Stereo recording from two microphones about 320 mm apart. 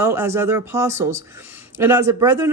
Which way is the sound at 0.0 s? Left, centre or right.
Centre.